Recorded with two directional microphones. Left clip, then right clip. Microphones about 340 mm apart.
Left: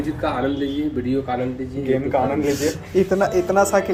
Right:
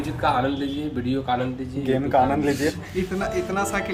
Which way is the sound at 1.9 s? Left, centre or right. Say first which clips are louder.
Even; right.